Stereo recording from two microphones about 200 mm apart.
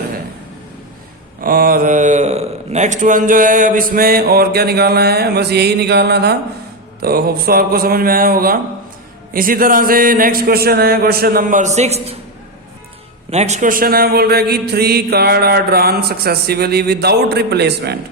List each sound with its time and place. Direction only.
1.4 s speech: 45° right (ahead or behind)
13.3 s speech: 35° right (ahead or behind); by 17.9 s 55° right (ahead or behind)